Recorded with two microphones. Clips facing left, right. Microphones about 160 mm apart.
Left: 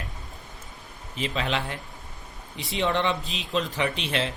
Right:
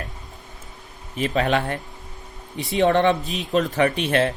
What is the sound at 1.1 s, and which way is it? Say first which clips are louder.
A man's voice: right 7 dB; 50° right (ahead or behind).